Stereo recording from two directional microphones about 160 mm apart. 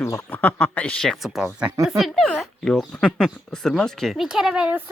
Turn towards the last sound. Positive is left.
turn(degrees=-5)  # may be behind; listen again after turning